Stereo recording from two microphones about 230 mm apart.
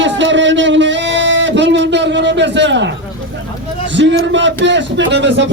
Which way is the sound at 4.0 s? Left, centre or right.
Right.